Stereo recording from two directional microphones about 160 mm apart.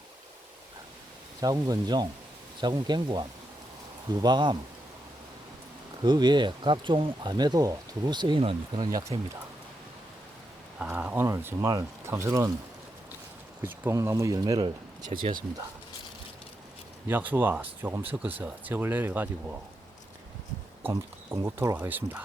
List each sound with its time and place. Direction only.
1.4 s speech: 25° right (ahead or behind)
6.0 s speech: 30° right (ahead or behind)
10.8 s speech: 10° right (ahead or behind)
13.6 s speech: 15° right (ahead or behind)
17.1 s speech: 10° right (ahead or behind)
20.9 s speech: 20° right (ahead or behind)